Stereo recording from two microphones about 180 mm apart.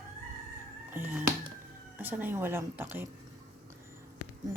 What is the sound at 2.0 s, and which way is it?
Speech, 10° right (ahead or behind).